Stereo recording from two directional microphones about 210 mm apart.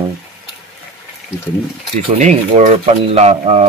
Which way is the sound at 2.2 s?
35° right (ahead or behind).